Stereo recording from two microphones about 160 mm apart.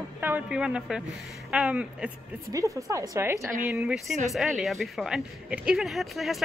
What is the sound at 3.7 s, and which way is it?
A woman's voice, 5° right (ahead or behind).